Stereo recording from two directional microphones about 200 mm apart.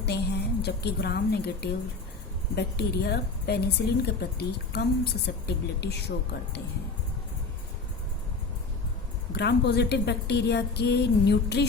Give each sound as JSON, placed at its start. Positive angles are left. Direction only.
{"t": 0.0, "sound": "a woman's voice", "side_deg": 55}
{"t": 9.3, "sound": "a woman's voice", "side_deg": 55}